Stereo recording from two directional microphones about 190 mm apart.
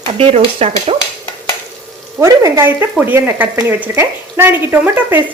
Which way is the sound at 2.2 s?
15° right (ahead or behind).